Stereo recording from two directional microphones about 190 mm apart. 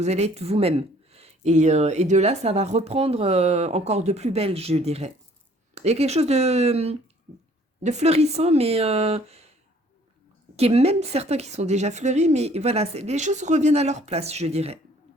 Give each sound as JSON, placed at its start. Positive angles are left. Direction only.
{"t": 0.0, "sound": "speech", "side_deg": -35}
{"t": 10.6, "sound": "speech", "side_deg": -35}